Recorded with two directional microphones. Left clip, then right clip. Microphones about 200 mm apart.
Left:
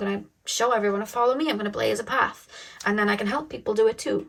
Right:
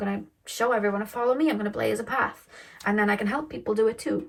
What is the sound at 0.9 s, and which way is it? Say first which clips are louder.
Speech: left 2 dB; 20° left (ahead or behind).